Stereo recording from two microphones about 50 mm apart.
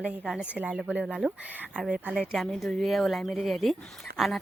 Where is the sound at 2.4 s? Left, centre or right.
Centre.